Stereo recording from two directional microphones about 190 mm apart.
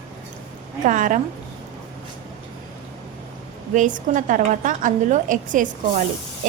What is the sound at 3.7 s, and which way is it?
A woman's voice, 40° right (ahead or behind).